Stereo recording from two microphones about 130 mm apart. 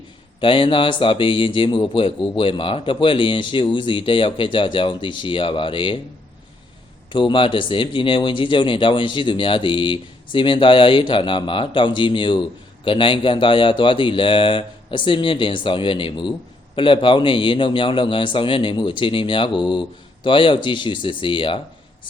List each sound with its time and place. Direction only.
0.3 s a man's voice: 40° left (ahead or behind)
7.1 s a man's voice: 40° left (ahead or behind)